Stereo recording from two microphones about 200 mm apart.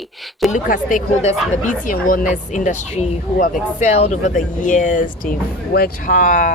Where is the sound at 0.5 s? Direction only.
40° left (ahead or behind).